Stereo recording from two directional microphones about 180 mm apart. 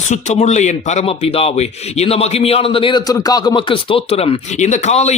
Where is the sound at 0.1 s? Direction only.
40° left (ahead or behind).